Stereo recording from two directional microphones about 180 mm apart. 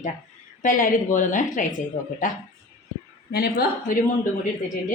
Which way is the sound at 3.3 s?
60° left (ahead or behind).